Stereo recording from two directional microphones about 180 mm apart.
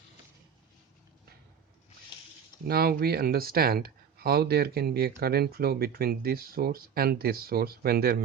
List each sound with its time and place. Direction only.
2.6 s speech: 60° right (ahead or behind)